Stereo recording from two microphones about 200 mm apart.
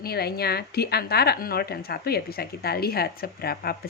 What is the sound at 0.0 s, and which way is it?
A woman's voice, 50° left (ahead or behind).